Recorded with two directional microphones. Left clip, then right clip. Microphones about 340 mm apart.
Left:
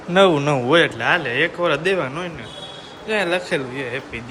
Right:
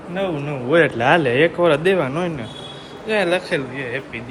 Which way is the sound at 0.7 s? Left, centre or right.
Centre.